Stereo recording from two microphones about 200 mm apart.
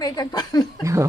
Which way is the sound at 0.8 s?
15° right (ahead or behind).